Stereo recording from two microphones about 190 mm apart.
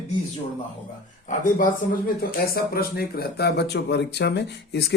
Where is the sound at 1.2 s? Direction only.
40° left (ahead or behind).